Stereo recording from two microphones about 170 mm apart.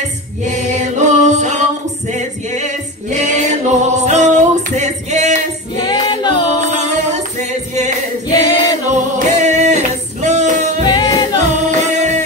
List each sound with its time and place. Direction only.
0.5 s chant: 45° right (ahead or behind)
2.1 s singing: 45° right (ahead or behind)
5.9 s choir: 25° left (ahead or behind)
6.7 s music: 45° right (ahead or behind)
8.3 s choir: 20° left (ahead or behind)
8.9 s music: 45° right (ahead or behind)
10.8 s music: 25° left (ahead or behind)
11.8 s music: 45° right (ahead or behind)